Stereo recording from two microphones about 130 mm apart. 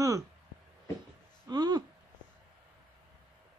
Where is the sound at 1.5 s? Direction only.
30° right (ahead or behind).